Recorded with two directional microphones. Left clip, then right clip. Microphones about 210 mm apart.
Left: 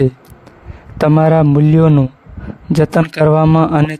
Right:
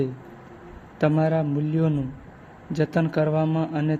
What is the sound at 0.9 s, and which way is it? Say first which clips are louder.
A man's voice: left 11 dB; 45° left (ahead or behind).